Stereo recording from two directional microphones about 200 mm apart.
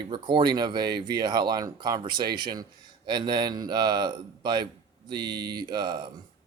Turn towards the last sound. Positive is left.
turn(degrees=-20)  # may be behind; listen again after turning